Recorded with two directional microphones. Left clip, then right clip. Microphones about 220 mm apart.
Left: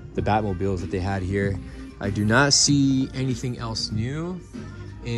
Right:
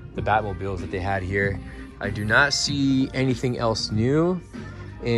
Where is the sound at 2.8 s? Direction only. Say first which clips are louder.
Right 1 dB; 20° left (ahead or behind); by 4.6 s centre (ahead or behind).